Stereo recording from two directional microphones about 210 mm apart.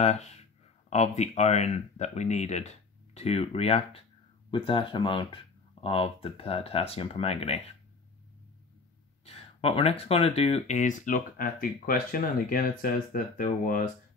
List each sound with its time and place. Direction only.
0.0 s speech: 30° left (ahead or behind)
9.2 s speech: 30° left (ahead or behind)